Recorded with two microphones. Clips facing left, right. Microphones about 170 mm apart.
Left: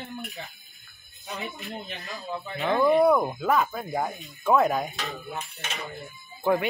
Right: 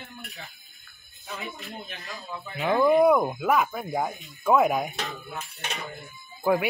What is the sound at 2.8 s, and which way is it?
Cutlery, 15° right (ahead or behind).